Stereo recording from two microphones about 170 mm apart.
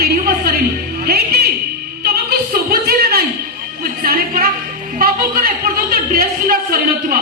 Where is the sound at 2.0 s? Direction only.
65° right (ahead or behind).